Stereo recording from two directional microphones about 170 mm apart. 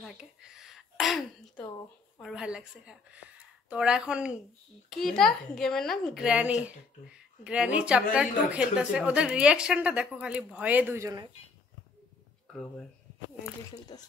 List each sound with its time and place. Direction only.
0.0 s a woman's voice: 5° right (ahead or behind)
13.9 s speech: 25° left (ahead or behind)